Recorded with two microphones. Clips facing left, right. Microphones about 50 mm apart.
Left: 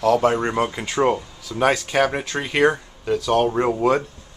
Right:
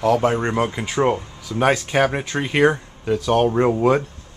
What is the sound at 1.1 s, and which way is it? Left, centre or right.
Speech, centre.